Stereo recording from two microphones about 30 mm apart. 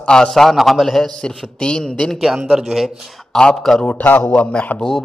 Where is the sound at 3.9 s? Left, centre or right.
Left.